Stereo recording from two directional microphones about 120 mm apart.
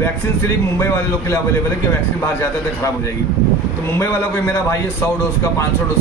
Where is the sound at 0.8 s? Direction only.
20° left (ahead or behind).